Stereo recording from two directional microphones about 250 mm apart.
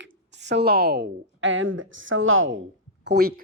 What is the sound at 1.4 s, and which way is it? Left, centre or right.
A woman's voice, right.